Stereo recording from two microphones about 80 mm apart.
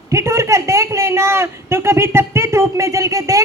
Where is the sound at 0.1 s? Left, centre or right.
Right.